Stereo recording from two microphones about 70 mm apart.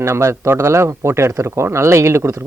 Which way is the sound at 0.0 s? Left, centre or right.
Right.